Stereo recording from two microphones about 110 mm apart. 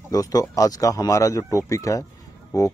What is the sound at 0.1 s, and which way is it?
Speech, 35° left (ahead or behind).